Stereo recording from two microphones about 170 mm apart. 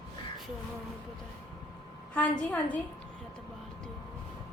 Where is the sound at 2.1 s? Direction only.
10° left (ahead or behind).